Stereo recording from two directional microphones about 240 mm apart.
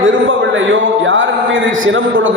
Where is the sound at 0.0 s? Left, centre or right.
Right.